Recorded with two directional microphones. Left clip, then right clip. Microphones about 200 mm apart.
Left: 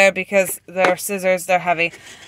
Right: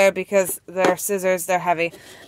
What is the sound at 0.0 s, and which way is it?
Speech, centre (ahead or behind).